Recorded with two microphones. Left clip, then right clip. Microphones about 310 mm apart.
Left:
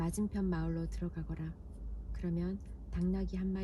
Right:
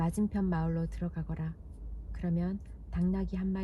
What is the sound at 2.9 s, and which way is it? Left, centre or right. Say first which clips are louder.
Speech: right 3 dB; right.